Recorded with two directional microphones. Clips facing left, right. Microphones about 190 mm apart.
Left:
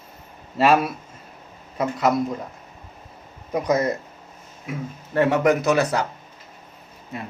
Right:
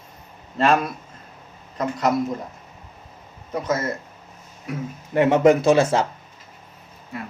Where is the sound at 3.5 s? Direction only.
15° left (ahead or behind).